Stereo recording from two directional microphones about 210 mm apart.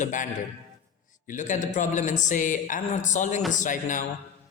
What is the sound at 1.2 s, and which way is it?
A man's voice, 35° left (ahead or behind).